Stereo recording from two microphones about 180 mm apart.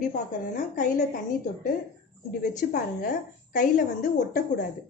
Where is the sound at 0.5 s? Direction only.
45° left (ahead or behind).